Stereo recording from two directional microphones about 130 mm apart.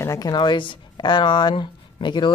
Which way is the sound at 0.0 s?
25° left (ahead or behind).